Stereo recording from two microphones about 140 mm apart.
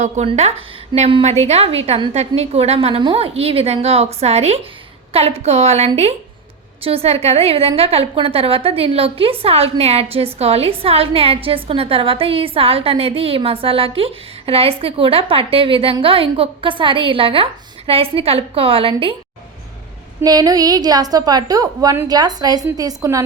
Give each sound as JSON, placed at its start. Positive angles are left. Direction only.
{"t": 0.3, "sound": "a woman's voice", "side_deg": -45}
{"t": 20.2, "sound": "a woman's voice", "side_deg": -30}